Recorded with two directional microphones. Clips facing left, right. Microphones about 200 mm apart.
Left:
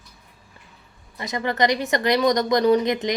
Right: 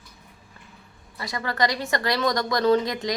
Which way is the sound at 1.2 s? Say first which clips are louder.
Left 3 dB; 20° left (ahead or behind).